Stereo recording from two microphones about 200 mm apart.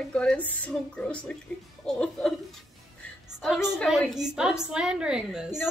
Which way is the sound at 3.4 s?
Centre (ahead or behind).